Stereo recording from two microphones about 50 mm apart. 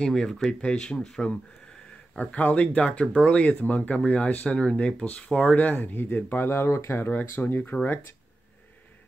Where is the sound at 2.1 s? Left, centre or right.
Left.